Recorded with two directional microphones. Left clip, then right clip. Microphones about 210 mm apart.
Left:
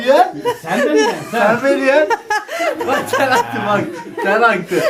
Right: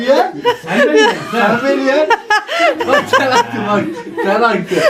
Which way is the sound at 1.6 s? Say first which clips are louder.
Even; 30° left (ahead or behind).